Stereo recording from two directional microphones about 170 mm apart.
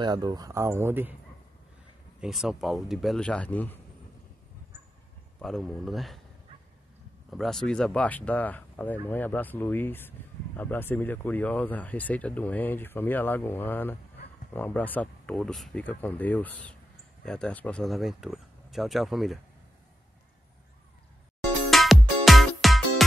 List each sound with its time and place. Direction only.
0.0 s speech: 25° right (ahead or behind)
2.1 s speech: 5° right (ahead or behind)
5.4 s speech: centre (ahead or behind)
7.2 s speech: centre (ahead or behind)
21.6 s music: centre (ahead or behind)